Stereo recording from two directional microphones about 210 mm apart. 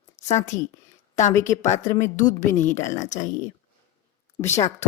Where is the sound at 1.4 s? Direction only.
35° left (ahead or behind).